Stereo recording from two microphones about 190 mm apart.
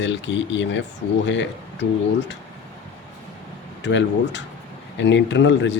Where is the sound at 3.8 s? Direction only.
65° left (ahead or behind).